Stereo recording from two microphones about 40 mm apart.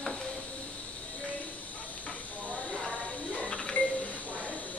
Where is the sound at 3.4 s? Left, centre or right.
Left.